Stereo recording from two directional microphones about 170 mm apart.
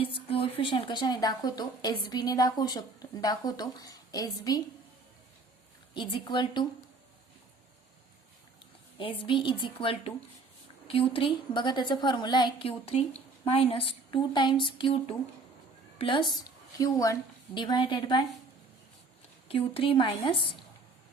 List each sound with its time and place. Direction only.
0.0 s a woman's voice: 30° left (ahead or behind)
5.9 s a woman's voice: 30° left (ahead or behind)
9.0 s a woman's voice: 30° left (ahead or behind)
19.5 s speech: 35° left (ahead or behind)